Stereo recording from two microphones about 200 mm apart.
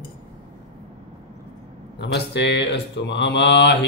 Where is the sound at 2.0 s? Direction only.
60° left (ahead or behind).